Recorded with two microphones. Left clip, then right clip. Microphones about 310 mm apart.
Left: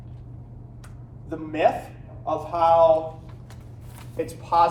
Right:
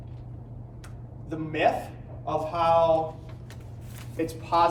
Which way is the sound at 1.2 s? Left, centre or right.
Centre.